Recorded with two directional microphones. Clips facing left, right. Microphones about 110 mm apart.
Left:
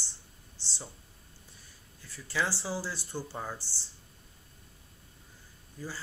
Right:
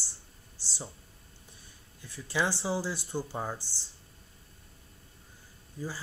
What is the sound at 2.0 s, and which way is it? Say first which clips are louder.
Speech: right 2 dB; 20° right (ahead or behind).